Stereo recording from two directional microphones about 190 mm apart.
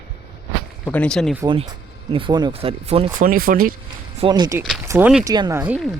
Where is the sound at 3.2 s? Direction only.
50° right (ahead or behind).